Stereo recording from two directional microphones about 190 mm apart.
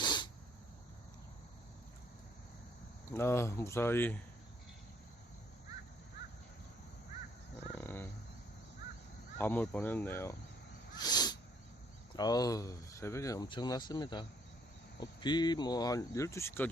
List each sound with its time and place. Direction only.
0.0 s sneeze: 25° left (ahead or behind)
3.1 s speech: 15° left (ahead or behind)
7.8 s dog: 10° left (ahead or behind)
9.4 s speech: 10° left (ahead or behind)
10.9 s sneeze: 20° left (ahead or behind)
12.1 s speech: 20° left (ahead or behind)